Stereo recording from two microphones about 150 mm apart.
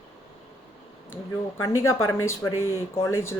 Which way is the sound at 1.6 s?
20° left (ahead or behind).